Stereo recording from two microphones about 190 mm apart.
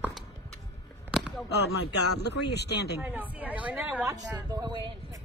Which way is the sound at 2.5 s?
60° left (ahead or behind).